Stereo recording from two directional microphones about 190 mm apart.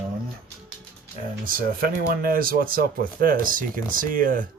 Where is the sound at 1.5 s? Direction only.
50° right (ahead or behind).